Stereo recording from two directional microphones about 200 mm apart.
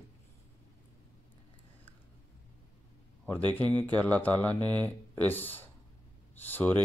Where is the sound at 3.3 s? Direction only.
10° left (ahead or behind).